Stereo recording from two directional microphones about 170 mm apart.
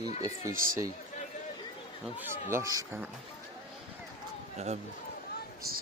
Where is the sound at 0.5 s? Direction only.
55° right (ahead or behind).